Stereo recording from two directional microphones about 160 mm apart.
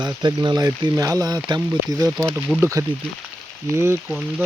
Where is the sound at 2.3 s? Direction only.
10° right (ahead or behind).